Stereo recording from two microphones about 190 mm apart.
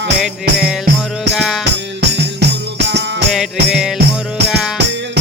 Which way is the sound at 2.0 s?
60° right (ahead or behind).